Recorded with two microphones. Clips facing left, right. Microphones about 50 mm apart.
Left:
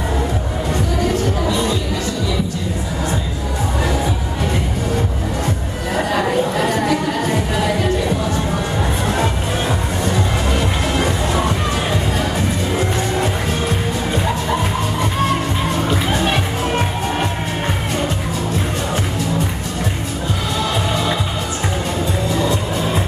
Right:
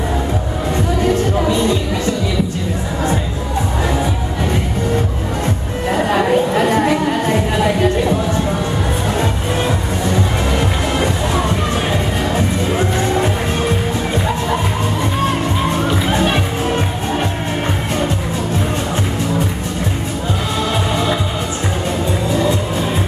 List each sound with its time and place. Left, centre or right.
5.9 s chatter: right